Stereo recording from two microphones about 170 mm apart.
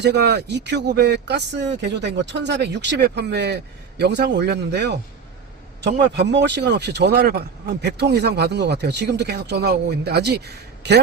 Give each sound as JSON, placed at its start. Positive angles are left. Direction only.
{"t": 0.0, "sound": "speech", "side_deg": -80}
{"t": 6.1, "sound": "speech", "side_deg": -90}